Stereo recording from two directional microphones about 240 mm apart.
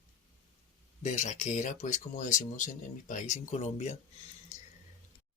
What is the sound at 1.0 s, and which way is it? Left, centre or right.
Speech, left.